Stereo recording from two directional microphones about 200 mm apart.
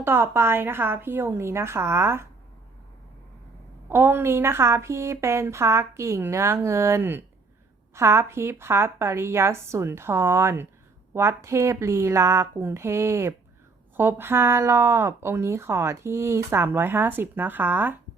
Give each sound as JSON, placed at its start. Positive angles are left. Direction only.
{"t": 0.0, "sound": "speech", "side_deg": -10}
{"t": 3.8, "sound": "speech", "side_deg": -10}